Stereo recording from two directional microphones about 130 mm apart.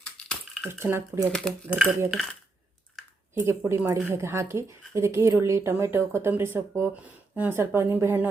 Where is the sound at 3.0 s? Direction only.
Centre (ahead or behind).